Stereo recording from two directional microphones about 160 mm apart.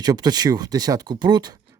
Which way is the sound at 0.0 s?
25° right (ahead or behind).